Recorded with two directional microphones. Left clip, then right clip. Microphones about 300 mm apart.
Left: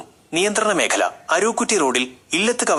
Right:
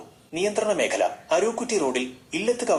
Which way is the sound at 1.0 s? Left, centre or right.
Left.